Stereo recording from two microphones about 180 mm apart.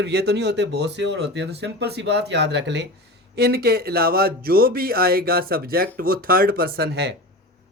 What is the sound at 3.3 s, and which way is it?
Speech, 60° right (ahead or behind).